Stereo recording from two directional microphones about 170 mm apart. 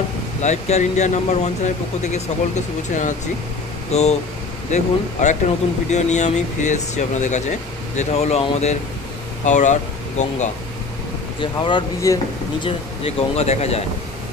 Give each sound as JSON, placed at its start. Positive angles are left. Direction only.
{"t": 0.4, "sound": "speech", "side_deg": 40}
{"t": 11.6, "sound": "speech", "side_deg": 25}
{"t": 12.6, "sound": "speech", "side_deg": 35}